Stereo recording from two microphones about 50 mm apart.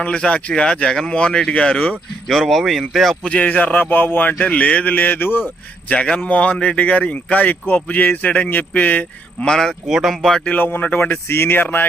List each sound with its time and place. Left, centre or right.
0.3 s speech: left
2.4 s speech: centre
3.2 s speech: left
3.8 s speech: left
6.2 s speech: left
9.5 s speech: centre
9.8 s speech: centre
10.6 s speech: left